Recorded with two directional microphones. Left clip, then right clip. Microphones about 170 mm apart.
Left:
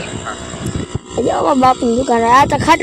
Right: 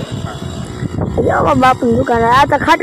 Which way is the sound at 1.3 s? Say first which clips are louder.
Right 1 dB; 30° left (ahead or behind).